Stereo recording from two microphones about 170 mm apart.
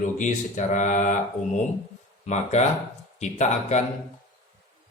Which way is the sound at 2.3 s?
40° left (ahead or behind).